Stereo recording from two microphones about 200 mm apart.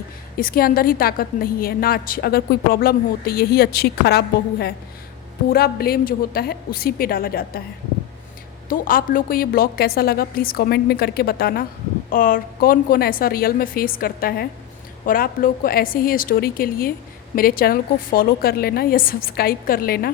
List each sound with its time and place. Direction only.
0.3 s a woman's voice: 45° left (ahead or behind)
8.7 s a woman's voice: 45° left (ahead or behind)